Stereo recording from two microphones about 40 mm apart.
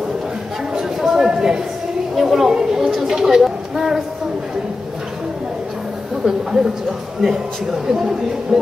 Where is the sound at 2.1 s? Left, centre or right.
Centre.